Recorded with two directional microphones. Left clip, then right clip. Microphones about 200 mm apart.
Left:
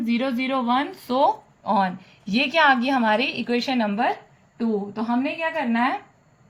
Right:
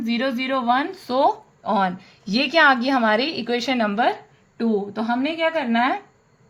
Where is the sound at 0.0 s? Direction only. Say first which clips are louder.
Right 1 dB; 30° right (ahead or behind).